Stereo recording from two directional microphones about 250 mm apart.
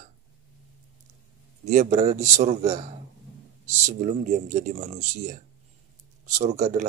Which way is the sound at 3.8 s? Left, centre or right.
Right.